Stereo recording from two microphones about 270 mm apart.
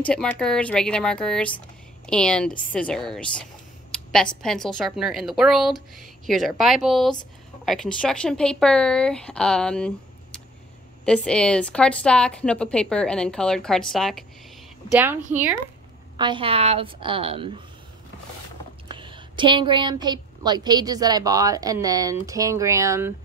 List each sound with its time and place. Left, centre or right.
0.0 s a woman's voice: centre
16.2 s a woman's voice: centre
18.9 s a woman's voice: centre